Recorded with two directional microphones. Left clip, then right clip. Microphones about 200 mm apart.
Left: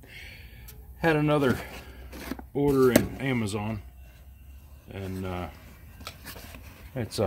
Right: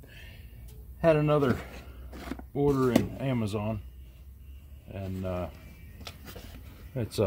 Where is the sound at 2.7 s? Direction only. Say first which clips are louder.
Left 7 dB; 15° right (ahead or behind).